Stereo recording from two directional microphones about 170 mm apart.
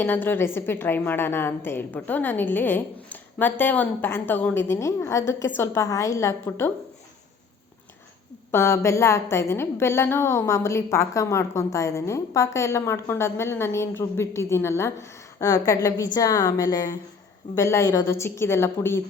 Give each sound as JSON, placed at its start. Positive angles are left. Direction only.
{"t": 0.0, "sound": "a woman's voice", "side_deg": 10}
{"t": 8.5, "sound": "a woman's voice", "side_deg": 15}